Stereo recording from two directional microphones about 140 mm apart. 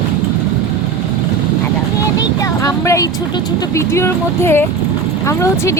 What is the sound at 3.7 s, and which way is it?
Speech, 20° left (ahead or behind).